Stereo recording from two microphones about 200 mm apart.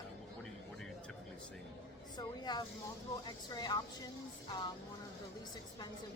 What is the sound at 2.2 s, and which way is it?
Speech, 20° left (ahead or behind).